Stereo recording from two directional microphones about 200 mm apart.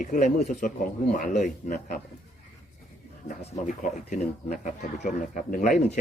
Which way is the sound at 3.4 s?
35° left (ahead or behind).